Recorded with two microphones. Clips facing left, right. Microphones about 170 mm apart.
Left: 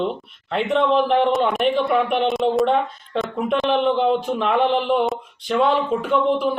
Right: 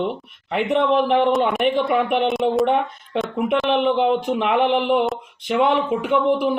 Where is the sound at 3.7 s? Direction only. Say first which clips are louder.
Even; 15° right (ahead or behind).